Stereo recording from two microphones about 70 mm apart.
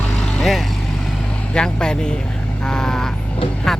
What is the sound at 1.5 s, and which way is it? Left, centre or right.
Speech, centre.